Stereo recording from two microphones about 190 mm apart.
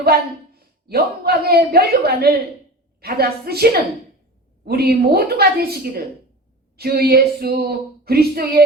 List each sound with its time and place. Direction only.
0.5 s speech: 55° right (ahead or behind)